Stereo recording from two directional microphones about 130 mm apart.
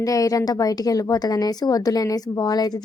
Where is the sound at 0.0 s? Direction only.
25° left (ahead or behind).